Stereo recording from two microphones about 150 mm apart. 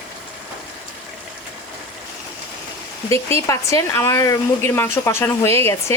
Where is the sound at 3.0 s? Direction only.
20° left (ahead or behind).